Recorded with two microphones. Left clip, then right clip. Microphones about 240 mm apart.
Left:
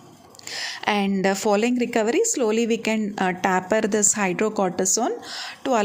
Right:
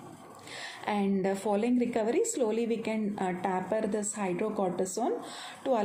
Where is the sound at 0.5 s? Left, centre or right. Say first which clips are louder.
Left 10 dB; left.